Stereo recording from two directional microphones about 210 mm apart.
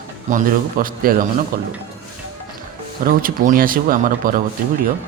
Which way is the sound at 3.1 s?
40° right (ahead or behind).